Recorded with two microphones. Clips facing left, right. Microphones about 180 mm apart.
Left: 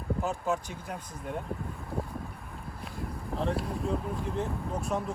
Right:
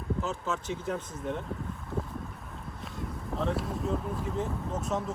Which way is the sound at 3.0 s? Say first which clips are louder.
Even; centre (ahead or behind).